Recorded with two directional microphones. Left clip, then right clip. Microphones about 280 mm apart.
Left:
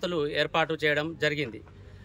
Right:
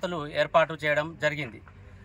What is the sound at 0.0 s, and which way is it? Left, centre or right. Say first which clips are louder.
A man's voice: left 1 dB; centre.